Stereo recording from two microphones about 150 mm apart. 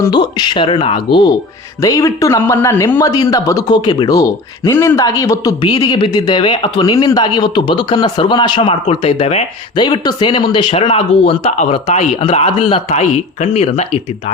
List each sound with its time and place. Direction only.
0.0 s speech: 30° left (ahead or behind)
9.7 s speech: 30° left (ahead or behind); by 14.0 s 50° left (ahead or behind)